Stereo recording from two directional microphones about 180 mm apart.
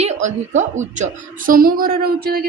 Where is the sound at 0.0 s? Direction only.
40° right (ahead or behind).